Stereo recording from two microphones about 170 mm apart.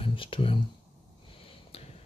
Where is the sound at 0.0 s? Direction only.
30° left (ahead or behind).